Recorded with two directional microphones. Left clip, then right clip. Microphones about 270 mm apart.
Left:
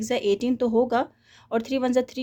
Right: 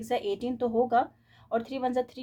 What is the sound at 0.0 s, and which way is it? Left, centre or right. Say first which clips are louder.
Speech: left 6 dB; left.